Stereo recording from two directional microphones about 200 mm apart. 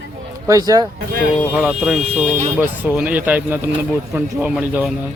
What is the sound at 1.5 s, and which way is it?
Speech, 5° right (ahead or behind).